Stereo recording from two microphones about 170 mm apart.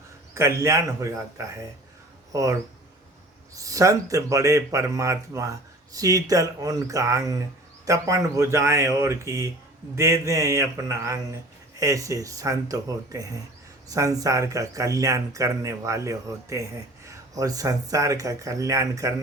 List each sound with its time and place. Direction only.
0.3 s a man's voice: 15° right (ahead or behind)
2.3 s a man's voice: 20° right (ahead or behind)